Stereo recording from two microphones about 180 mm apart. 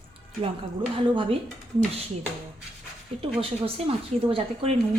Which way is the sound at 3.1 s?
30° right (ahead or behind).